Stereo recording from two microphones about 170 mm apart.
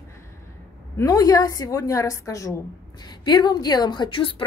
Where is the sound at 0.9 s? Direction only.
20° left (ahead or behind).